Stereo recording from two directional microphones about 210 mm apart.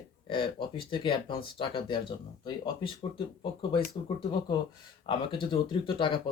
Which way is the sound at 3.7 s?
20° left (ahead or behind).